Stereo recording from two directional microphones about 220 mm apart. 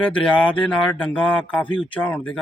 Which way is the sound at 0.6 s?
5° left (ahead or behind).